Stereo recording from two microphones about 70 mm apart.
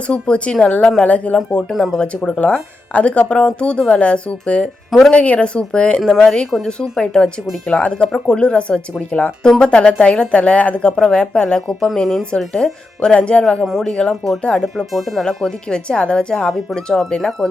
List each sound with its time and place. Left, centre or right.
0.1 s speech: centre
1.7 s speech: centre
2.0 s speech: centre
4.9 s speech: centre
5.1 s speech: centre
6.0 s speech: centre